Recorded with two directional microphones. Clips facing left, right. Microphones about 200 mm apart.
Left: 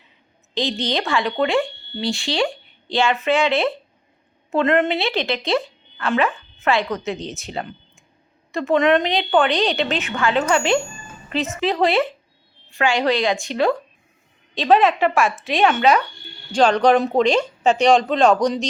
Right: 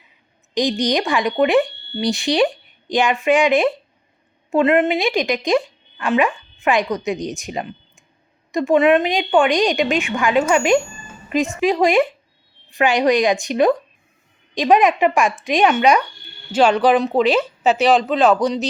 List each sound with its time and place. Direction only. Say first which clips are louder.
0.5 s a woman's voice: right 4 dB; 15° right (ahead or behind)